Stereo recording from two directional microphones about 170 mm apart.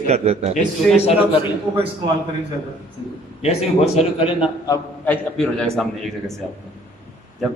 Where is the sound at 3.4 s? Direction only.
40° left (ahead or behind).